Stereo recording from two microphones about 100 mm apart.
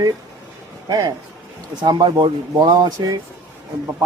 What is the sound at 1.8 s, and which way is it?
Speech, 50° right (ahead or behind).